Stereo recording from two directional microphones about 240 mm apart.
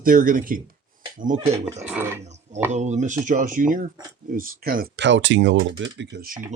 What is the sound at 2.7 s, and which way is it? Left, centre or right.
Speech, right.